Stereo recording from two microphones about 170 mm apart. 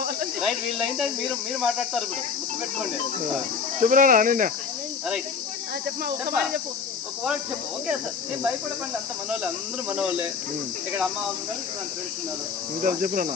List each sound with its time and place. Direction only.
0.4 s speech: centre (ahead or behind)
3.8 s speech: 50° right (ahead or behind)
9.9 s speech: 5° right (ahead or behind)
12.8 s speech: 55° right (ahead or behind)